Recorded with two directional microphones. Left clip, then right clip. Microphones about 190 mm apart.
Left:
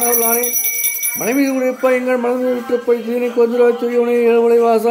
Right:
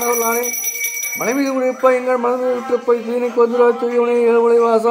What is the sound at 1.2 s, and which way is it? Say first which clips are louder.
Speech: left 1 dB; 20° left (ahead or behind).